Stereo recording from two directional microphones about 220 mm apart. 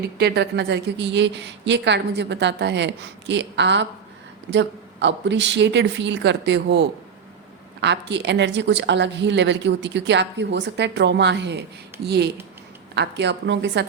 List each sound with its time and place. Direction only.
0.2 s a woman's voice: 50° right (ahead or behind)